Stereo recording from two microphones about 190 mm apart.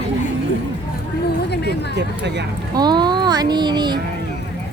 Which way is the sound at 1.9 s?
65° right (ahead or behind).